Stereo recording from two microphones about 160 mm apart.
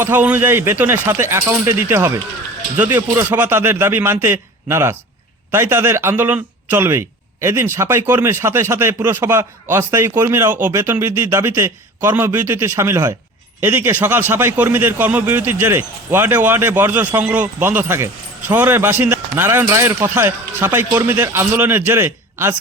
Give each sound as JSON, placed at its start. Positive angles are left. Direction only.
{"t": 0.0, "sound": "a man's voice", "side_deg": -10}